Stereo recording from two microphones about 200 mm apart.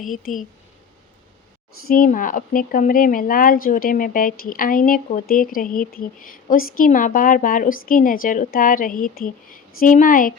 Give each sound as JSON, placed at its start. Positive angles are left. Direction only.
{"t": 0.2, "sound": "speech", "side_deg": 40}
{"t": 1.9, "sound": "speech", "side_deg": 45}